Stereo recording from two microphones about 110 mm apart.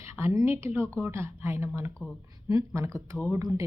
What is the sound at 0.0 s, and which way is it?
A woman's voice, 25° right (ahead or behind).